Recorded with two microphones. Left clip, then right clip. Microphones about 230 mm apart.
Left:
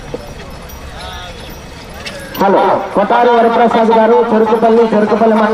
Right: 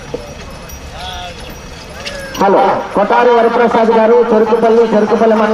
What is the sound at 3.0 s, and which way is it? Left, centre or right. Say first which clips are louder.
Speech: right 1 dB; centre.